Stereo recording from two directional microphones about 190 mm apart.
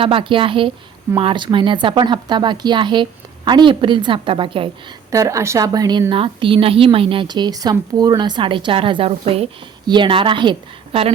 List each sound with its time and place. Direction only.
0.0 s a woman's voice: 25° right (ahead or behind)
5.1 s a woman's voice: 15° right (ahead or behind)